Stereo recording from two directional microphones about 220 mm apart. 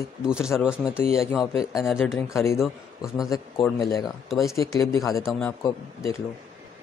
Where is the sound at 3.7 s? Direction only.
15° left (ahead or behind).